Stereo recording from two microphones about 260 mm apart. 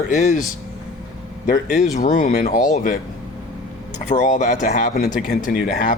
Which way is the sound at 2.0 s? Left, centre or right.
Left.